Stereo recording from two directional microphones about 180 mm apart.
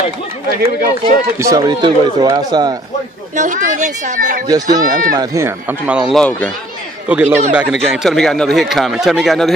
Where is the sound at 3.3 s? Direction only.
45° right (ahead or behind).